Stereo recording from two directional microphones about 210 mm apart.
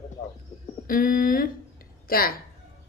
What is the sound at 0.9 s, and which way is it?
Speech, 40° left (ahead or behind).